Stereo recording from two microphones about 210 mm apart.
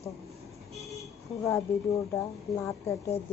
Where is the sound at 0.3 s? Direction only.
Centre (ahead or behind).